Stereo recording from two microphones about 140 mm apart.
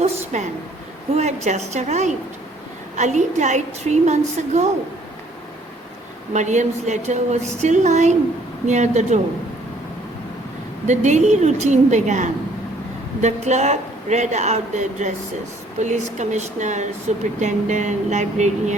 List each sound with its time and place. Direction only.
0.0 s a sound: 50° right (ahead or behind)
1.1 s a woman's voice: 55° right (ahead or behind)
6.3 s speech: 60° right (ahead or behind)
10.8 s speech: 55° right (ahead or behind)